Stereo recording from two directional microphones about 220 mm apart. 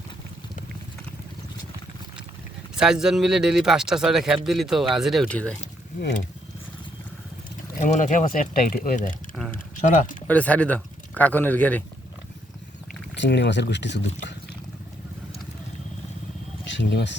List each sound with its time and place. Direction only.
2.7 s speech: 5° right (ahead or behind)
7.8 s speech: 35° left (ahead or behind)
9.5 s a sound: 35° left (ahead or behind)
10.2 s speech: 5° left (ahead or behind)
13.1 s speech: 55° left (ahead or behind)
16.6 s speech: 55° left (ahead or behind)